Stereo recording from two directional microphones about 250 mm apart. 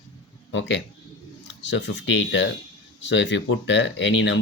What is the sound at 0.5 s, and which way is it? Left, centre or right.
Speech, left.